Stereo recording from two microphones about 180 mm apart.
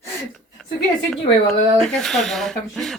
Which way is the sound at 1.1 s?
Centre (ahead or behind).